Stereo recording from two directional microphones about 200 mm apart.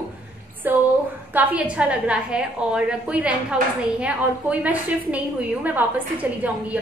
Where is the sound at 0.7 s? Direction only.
10° right (ahead or behind).